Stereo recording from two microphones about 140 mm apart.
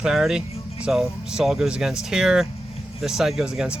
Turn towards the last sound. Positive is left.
turn(degrees=-5)  # may be behind; listen again after turning